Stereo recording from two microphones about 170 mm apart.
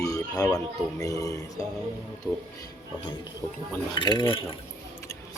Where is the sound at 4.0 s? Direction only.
25° left (ahead or behind).